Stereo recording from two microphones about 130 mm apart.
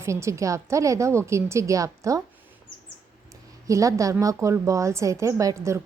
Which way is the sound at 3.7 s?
25° right (ahead or behind).